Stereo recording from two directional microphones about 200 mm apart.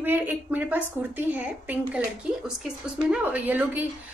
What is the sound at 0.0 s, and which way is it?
A woman's voice, 10° right (ahead or behind).